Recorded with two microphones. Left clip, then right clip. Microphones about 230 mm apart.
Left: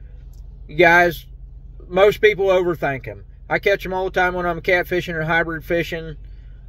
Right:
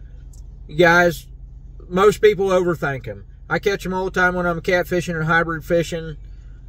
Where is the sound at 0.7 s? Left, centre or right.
Centre.